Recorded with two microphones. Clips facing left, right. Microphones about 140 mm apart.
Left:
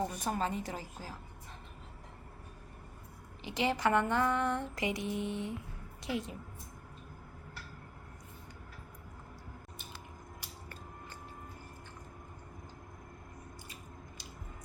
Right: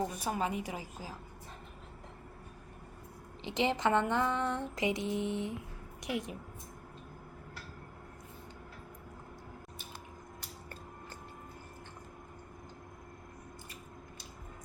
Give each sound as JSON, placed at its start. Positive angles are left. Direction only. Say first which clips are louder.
{"t": 0.0, "sound": "a woman's voice", "louder": "even", "side_deg": -10}
{"t": 3.4, "sound": "a sound", "louder": "right 1 dB", "side_deg": -20}
{"t": 6.0, "sound": "a woman's voice", "louder": "even", "side_deg": -15}